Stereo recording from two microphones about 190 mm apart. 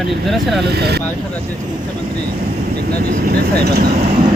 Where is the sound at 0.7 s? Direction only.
55° right (ahead or behind).